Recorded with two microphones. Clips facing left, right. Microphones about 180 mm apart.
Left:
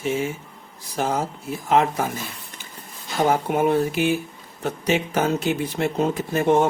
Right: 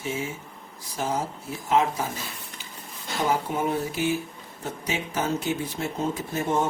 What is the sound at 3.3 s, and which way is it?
Speech, 65° left (ahead or behind).